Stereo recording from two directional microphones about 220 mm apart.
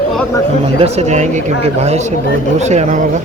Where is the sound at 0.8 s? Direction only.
30° right (ahead or behind).